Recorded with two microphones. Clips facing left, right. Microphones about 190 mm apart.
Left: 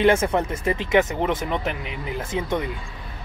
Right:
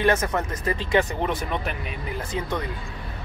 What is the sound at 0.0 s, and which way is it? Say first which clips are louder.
Speech: left 4 dB; 25° left (ahead or behind).